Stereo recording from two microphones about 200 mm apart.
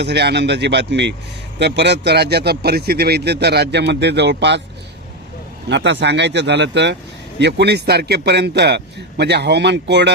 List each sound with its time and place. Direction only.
0.0 s a man's voice: 55° right (ahead or behind)
5.6 s a man's voice: 60° right (ahead or behind)